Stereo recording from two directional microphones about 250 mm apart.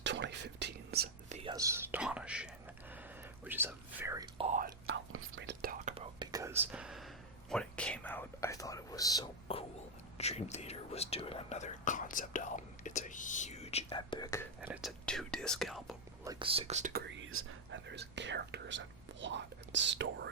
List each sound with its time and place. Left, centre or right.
0.0 s whispering: right
1.4 s whispering: centre
4.4 s whispering: right
4.9 s whispering: right; by 14.4 s centre
14.6 s whispering: centre
16.2 s speech: centre
17.1 s whispering: right